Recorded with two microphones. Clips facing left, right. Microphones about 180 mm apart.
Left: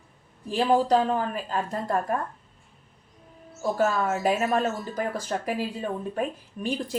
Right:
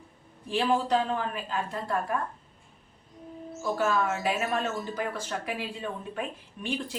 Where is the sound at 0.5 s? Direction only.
40° left (ahead or behind).